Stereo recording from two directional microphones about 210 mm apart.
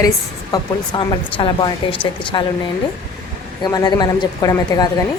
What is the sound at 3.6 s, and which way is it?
Speech, 20° left (ahead or behind).